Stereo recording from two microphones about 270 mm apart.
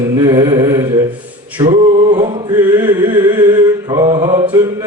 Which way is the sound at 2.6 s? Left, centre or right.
Centre.